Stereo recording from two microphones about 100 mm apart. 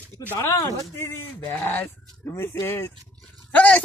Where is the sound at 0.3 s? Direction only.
35° left (ahead or behind).